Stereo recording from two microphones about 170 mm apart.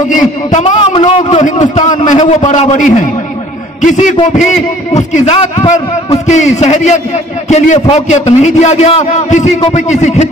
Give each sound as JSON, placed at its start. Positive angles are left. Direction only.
{"t": 0.1, "sound": "a man's voice", "side_deg": 45}